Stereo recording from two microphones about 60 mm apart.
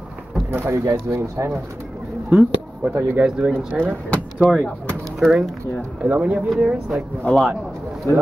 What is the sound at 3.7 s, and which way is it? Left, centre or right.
Speech, centre.